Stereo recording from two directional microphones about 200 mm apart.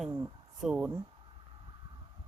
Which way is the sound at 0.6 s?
5° right (ahead or behind).